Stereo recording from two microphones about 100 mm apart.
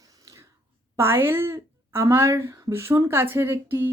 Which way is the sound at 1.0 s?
25° right (ahead or behind).